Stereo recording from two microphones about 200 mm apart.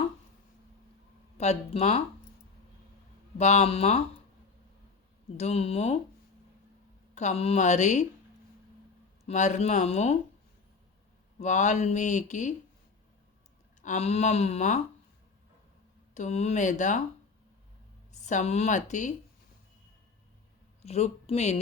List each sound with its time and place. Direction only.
1.4 s speech: 35° left (ahead or behind)
3.3 s speech: 35° left (ahead or behind)
5.4 s speech: 30° left (ahead or behind)
7.2 s speech: 35° left (ahead or behind)
9.2 s speech: 35° left (ahead or behind)
11.3 s speech: 35° left (ahead or behind)
13.8 s speech: 35° left (ahead or behind)
16.1 s speech: 35° left (ahead or behind)
18.1 s speech: 35° left (ahead or behind)
20.8 s speech: 30° left (ahead or behind)